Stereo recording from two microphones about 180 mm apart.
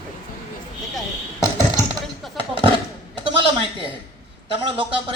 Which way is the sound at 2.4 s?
30° right (ahead or behind).